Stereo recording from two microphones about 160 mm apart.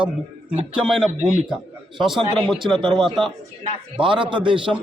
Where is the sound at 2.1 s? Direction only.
30° right (ahead or behind).